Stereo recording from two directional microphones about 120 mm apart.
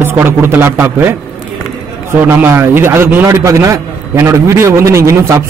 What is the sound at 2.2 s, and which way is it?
A man's voice, 20° right (ahead or behind).